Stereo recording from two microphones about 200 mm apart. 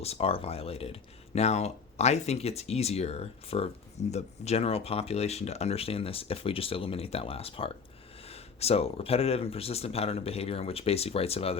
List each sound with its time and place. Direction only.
0.0 s speech: 30° left (ahead or behind)